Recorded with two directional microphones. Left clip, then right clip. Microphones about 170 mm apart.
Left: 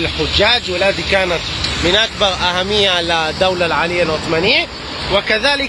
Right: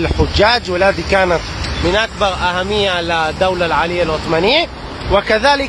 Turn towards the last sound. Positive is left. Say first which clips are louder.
# right 2 dB
turn(degrees=-30)  # may be behind; listen again after turning